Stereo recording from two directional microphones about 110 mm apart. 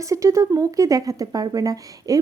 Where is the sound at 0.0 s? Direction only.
30° right (ahead or behind).